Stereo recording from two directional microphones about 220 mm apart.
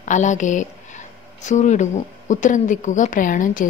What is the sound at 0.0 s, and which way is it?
Speech, 35° left (ahead or behind).